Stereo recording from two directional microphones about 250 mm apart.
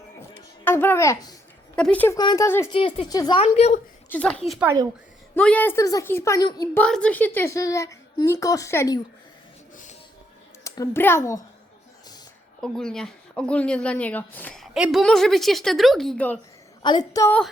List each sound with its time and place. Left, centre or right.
0.2 s a sound: centre
1.7 s a woman's voice: centre; by 3.8 s left
4.1 s speech: centre
4.6 s speech: centre
5.3 s speech: centre
9.7 s music: left
10.6 s a child's voice: centre
12.6 s speech: centre
16.8 s speech: centre